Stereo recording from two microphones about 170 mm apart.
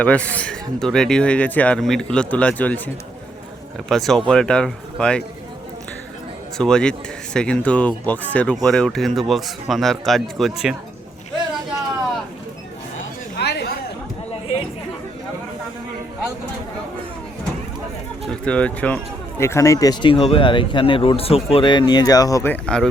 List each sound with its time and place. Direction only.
0.0 s speech: 10° left (ahead or behind)
6.6 s speech: 5° left (ahead or behind)
13.3 s a sound: 75° left (ahead or behind)
18.3 s speech: 5° left (ahead or behind)
22.6 s speech: 5° left (ahead or behind)